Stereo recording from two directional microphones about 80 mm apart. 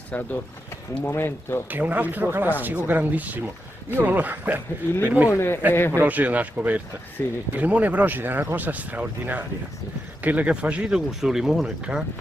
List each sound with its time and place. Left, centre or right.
0.1 s speech: centre
1.7 s speech: right
5.3 s speech: left
6.0 s speech: centre
7.2 s speech: left
7.5 s speech: centre